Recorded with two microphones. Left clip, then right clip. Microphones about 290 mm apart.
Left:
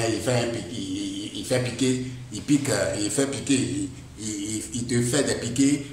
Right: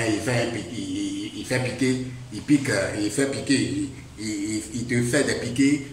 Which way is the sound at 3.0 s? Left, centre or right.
Centre.